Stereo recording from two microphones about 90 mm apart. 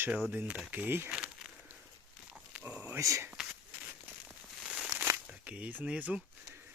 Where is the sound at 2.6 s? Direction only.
15° right (ahead or behind).